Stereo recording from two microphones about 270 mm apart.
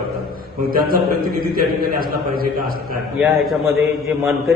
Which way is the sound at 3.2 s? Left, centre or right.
Centre.